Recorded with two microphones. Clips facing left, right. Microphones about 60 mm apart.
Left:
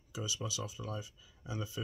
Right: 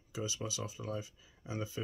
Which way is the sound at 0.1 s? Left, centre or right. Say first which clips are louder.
Right 1 dB; right.